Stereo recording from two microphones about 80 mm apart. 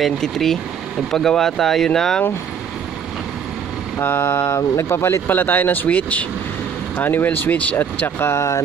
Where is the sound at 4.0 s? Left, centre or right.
Left.